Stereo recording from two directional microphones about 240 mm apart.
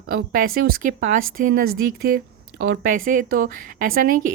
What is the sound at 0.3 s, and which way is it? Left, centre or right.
A woman's voice, right.